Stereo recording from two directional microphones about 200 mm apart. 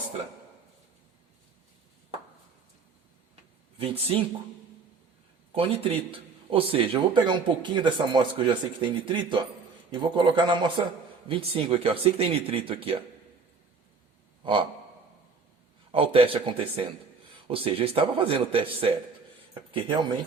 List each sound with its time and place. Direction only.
3.8 s speech: 30° right (ahead or behind)
5.5 s speech: 30° right (ahead or behind)
14.4 s gasp: 25° right (ahead or behind)
15.9 s speech: 25° right (ahead or behind)